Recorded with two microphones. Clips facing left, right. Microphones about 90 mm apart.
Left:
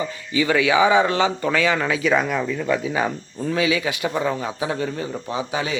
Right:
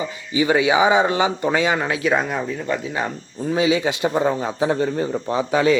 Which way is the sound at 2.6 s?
5° left (ahead or behind).